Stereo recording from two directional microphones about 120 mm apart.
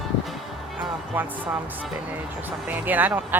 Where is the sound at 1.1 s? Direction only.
15° right (ahead or behind).